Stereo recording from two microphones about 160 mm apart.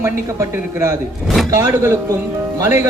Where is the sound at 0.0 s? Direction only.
20° right (ahead or behind).